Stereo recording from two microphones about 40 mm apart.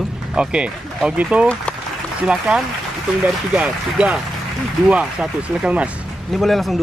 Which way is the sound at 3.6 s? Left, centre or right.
Right.